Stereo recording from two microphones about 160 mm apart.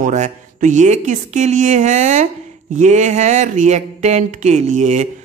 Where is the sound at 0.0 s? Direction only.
50° right (ahead or behind).